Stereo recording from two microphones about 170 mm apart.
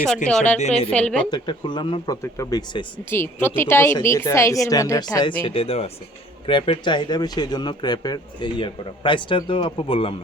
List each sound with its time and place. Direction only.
0.3 s a woman's voice: 5° left (ahead or behind)
1.3 s speech: 25° left (ahead or behind)
5.4 s speech: 35° left (ahead or behind)